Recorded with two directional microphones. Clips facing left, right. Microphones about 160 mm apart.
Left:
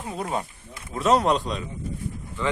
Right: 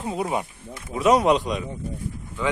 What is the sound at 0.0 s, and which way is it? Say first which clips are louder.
Speech: right 3 dB; 20° right (ahead or behind).